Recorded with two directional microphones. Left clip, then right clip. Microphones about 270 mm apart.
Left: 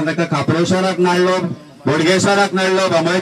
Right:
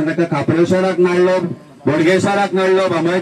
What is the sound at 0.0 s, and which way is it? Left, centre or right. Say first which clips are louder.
A man's voice: right 1 dB; left.